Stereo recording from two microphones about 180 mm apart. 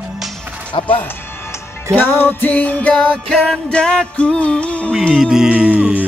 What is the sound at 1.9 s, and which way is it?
Music, 10° left (ahead or behind).